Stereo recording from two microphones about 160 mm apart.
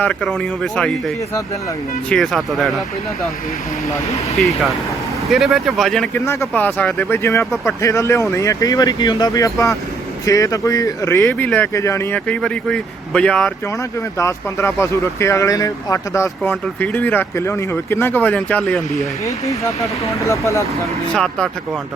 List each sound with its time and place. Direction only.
0.0 s speech: 5° left (ahead or behind)
4.4 s speech: centre (ahead or behind)
6.2 s speech: 15° left (ahead or behind)
14.2 s speech: 20° left (ahead or behind)
19.2 s speech: 20° left (ahead or behind)
21.1 s speech: 5° left (ahead or behind)